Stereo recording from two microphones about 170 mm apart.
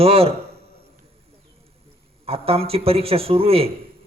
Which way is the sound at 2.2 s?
35° right (ahead or behind).